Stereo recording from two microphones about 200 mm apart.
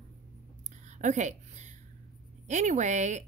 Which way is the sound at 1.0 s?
35° right (ahead or behind).